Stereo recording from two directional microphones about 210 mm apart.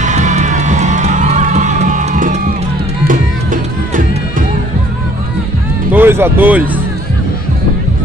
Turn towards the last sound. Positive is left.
turn(degrees=-10)  # may be behind; listen again after turning